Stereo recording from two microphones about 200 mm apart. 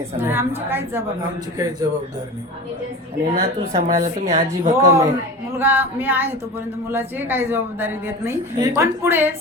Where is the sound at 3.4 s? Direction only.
40° right (ahead or behind).